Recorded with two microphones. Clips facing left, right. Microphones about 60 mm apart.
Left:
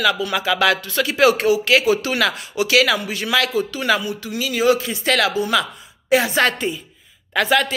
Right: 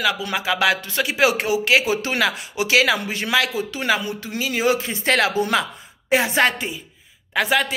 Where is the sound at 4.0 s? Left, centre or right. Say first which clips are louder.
Left 1 dB; right.